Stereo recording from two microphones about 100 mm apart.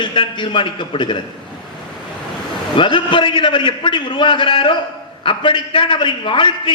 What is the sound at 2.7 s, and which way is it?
A man's voice, 55° left (ahead or behind).